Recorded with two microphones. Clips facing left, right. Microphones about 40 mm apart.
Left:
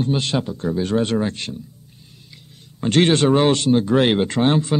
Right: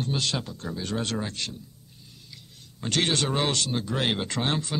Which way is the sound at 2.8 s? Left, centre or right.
Left.